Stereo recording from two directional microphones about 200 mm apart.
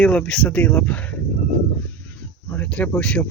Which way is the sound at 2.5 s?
5° left (ahead or behind).